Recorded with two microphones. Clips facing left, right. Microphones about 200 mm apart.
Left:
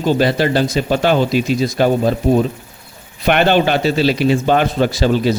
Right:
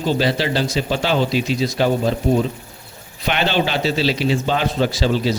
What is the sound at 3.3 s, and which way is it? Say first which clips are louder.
A man's voice: left 6 dB; 55° left (ahead or behind).